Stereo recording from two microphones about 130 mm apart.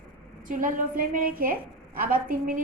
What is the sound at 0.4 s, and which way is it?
A woman's voice, 90° right.